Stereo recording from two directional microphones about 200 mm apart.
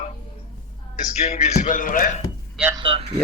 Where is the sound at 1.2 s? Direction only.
35° left (ahead or behind).